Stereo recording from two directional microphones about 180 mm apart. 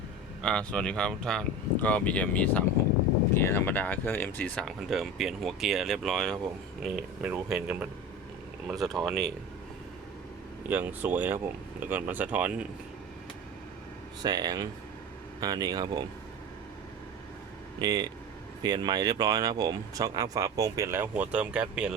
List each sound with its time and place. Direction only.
0.4 s speech: 5° left (ahead or behind)
10.7 s speech: 10° right (ahead or behind)
14.2 s speech: 20° right (ahead or behind)
17.7 s speech: 20° right (ahead or behind)